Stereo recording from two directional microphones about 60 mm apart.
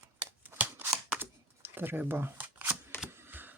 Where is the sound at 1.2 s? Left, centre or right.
Right.